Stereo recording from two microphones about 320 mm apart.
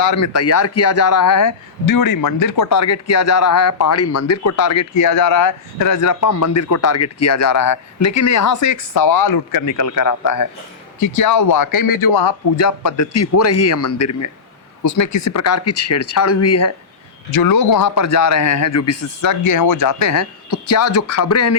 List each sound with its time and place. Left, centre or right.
0.0 s a man's voice: left
12.5 s a man's voice: left
17.3 s a man's voice: left